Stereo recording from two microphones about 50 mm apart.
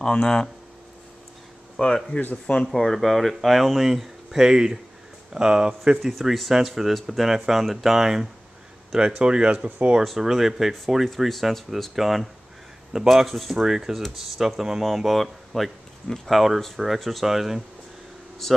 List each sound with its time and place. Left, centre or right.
0.0 s speech: centre
1.8 s speech: centre
2.1 s speech: left
2.7 s speech: centre
6.0 s speech: centre
9.2 s speech: centre
9.7 s speech: right
10.0 s speech: centre
11.1 s speech: centre
13.6 s speech: centre